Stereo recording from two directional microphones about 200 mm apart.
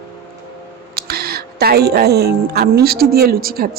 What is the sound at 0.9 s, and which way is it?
Speech, 50° right (ahead or behind).